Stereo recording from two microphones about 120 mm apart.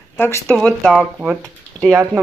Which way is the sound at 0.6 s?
5° left (ahead or behind).